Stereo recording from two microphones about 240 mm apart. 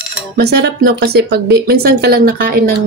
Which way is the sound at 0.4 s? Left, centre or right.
Right.